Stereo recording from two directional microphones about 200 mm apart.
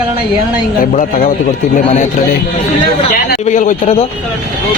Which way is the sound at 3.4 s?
40° left (ahead or behind).